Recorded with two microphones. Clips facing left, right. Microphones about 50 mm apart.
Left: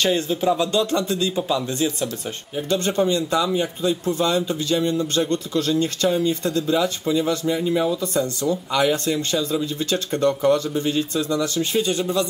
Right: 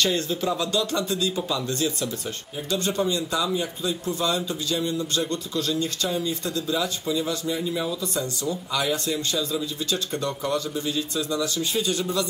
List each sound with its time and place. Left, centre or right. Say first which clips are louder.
0.0 s a man's voice: left 4 dB; left
1.5 s speech: left 4 dB; left
2.7 s a man's voice: left 4 dB; left